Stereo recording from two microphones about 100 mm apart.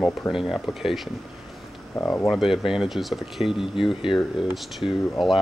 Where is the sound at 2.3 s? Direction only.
5° right (ahead or behind).